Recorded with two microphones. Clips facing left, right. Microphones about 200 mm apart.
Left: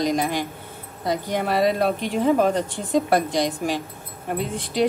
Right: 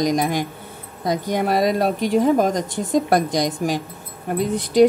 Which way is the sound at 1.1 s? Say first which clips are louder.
Right 3 dB; 45° right (ahead or behind).